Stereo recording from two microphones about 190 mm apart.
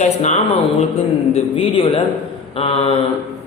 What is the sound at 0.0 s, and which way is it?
A man's voice, 40° left (ahead or behind).